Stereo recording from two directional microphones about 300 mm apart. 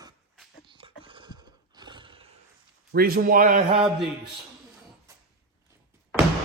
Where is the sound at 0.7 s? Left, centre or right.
Centre.